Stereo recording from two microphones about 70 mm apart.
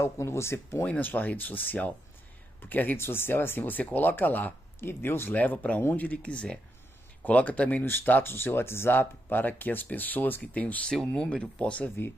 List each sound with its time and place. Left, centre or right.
0.0 s speech: left
0.8 s speech: left
5.3 s speech: left
5.8 s speech: left
6.0 s speech: centre